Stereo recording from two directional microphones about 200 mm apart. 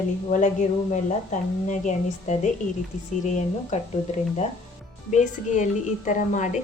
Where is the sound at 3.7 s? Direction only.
35° left (ahead or behind).